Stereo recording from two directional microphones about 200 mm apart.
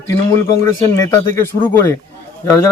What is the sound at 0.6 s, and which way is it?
Speech, 15° left (ahead or behind).